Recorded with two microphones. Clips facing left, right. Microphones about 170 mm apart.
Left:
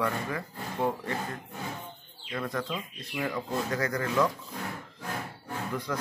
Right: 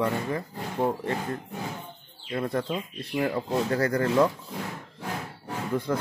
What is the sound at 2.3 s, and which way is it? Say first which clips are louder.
Speech: right 5 dB; 30° right (ahead or behind).